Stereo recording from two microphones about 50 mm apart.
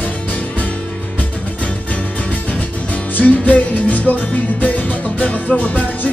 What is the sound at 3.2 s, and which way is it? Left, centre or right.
Music, left.